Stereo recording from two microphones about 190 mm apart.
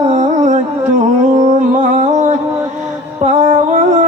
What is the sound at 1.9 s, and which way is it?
Music, 35° right (ahead or behind).